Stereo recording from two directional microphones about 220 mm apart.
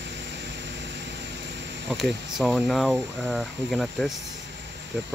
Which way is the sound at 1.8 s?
Centre (ahead or behind).